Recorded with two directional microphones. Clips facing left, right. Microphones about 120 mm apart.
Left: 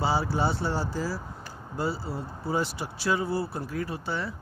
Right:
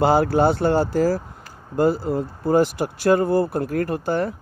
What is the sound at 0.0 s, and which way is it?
Speech, 55° right (ahead or behind).